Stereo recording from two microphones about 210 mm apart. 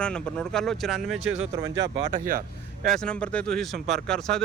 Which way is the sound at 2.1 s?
40° right (ahead or behind).